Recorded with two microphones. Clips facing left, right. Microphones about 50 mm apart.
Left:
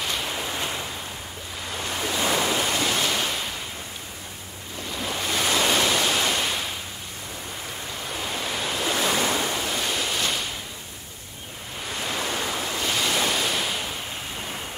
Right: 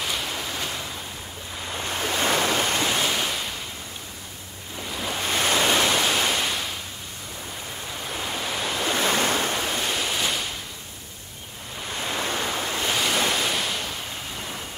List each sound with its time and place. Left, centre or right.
0.0 s a sound: centre
1.9 s waves: right
2.9 s waves: centre
4.8 s waves: centre
5.3 s waves: right
5.6 s pink noise: centre
8.1 s waves: centre
8.9 s waves: right
9.7 s waves: centre
12.0 s ocean: right
12.4 s waves: right
12.8 s waves: centre